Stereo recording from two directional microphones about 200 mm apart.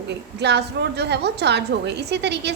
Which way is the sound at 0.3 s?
55° right (ahead or behind).